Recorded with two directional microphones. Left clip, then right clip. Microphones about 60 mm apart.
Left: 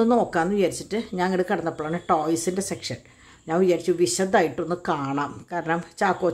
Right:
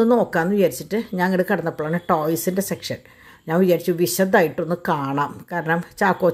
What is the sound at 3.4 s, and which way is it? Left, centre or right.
Speech, right.